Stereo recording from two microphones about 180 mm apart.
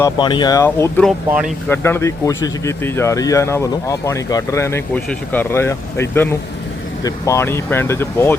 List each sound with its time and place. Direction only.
0.0 s speech: 25° left (ahead or behind)
1.0 s speech: centre (ahead or behind)
1.7 s speech: 15° left (ahead or behind)